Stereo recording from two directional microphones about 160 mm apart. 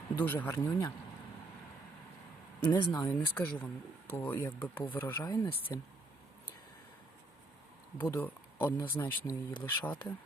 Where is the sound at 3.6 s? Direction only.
15° left (ahead or behind).